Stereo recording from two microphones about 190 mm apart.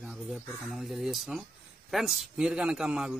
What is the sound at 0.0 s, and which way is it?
A man's voice, centre (ahead or behind).